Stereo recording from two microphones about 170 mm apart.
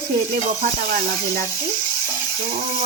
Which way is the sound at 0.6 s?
55° right (ahead or behind).